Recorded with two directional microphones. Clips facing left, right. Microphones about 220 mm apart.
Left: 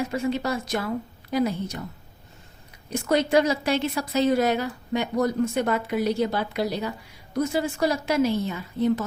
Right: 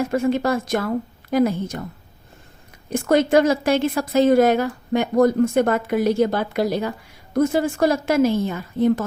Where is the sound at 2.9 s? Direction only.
50° right (ahead or behind).